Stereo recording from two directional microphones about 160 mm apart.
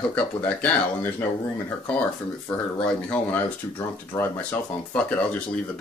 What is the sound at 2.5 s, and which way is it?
Speech, 10° left (ahead or behind).